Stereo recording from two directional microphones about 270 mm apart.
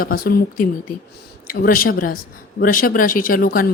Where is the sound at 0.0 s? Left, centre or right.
Left.